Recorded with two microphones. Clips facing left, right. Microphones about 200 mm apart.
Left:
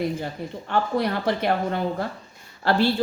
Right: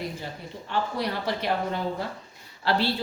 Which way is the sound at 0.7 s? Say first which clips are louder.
Left 5 dB; 55° left (ahead or behind).